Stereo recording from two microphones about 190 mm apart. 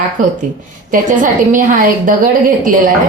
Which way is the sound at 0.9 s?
45° right (ahead or behind).